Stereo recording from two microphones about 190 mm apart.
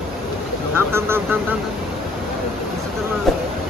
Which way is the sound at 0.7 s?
10° right (ahead or behind).